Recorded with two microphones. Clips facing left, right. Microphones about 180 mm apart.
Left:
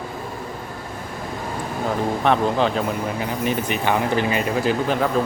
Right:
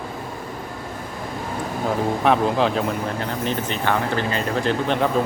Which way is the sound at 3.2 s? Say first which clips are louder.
Left 2 dB; 10° left (ahead or behind).